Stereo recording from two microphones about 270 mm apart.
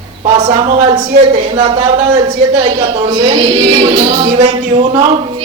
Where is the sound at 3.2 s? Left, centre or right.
Centre.